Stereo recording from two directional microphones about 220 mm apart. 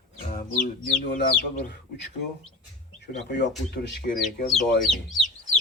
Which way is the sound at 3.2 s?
50° left (ahead or behind).